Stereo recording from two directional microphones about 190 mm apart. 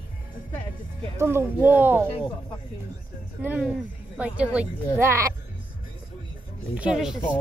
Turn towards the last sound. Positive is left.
turn(degrees=-5)  # may be behind; listen again after turning